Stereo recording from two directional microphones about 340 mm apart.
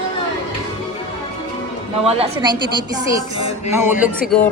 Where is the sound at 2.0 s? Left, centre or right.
Centre.